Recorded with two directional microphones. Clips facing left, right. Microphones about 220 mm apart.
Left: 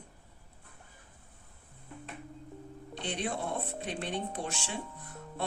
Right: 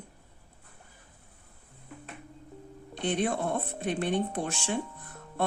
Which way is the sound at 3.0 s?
50° right (ahead or behind).